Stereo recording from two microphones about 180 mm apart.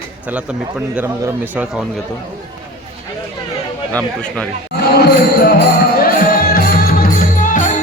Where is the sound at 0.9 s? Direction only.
10° right (ahead or behind).